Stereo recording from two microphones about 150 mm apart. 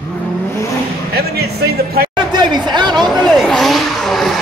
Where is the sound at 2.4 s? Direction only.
30° right (ahead or behind).